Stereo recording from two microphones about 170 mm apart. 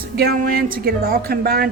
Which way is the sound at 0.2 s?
60° right (ahead or behind).